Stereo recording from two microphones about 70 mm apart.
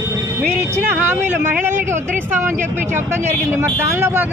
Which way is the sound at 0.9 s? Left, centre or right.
Right.